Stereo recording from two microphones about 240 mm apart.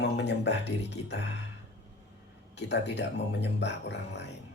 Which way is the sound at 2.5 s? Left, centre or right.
Left.